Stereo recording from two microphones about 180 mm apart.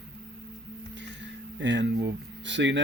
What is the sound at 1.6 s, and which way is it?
Speech, 90° right.